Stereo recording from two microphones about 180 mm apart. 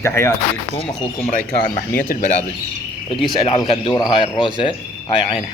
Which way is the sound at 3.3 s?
25° left (ahead or behind).